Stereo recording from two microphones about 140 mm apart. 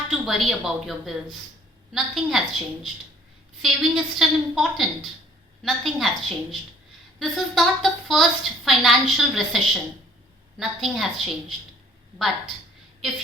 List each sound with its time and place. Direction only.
0.1 s a woman's voice: centre (ahead or behind)